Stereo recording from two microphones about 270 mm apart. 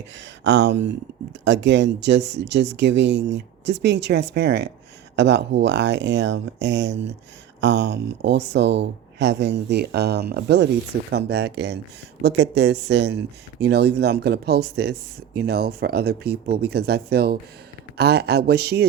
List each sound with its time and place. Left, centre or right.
0.2 s speech: right